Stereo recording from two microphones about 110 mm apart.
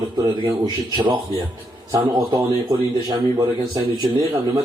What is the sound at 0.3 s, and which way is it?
Speech, 40° right (ahead or behind).